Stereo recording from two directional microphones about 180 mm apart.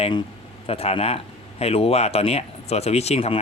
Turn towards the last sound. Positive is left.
turn(degrees=35)  # may be behind; listen again after turning